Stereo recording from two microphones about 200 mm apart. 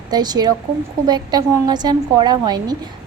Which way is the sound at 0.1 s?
20° right (ahead or behind).